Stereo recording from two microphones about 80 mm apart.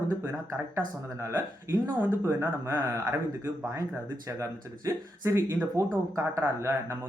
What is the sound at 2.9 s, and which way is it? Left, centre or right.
Speech, right.